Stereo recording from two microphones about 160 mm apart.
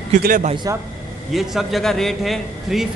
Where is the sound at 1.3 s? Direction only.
Centre (ahead or behind).